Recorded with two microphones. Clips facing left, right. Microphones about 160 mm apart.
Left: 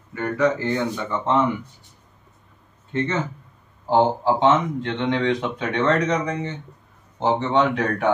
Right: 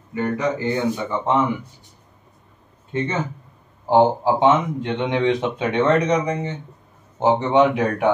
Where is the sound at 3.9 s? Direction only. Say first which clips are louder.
Right 2 dB; 15° right (ahead or behind).